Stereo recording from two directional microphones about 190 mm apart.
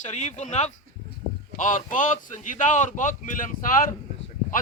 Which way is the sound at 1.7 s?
40° left (ahead or behind).